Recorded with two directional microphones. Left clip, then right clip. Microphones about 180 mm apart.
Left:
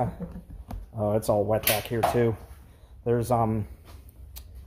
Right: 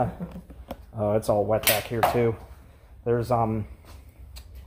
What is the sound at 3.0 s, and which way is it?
Speech, 30° left (ahead or behind).